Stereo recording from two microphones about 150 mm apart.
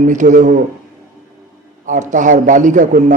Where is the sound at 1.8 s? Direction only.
55° right (ahead or behind).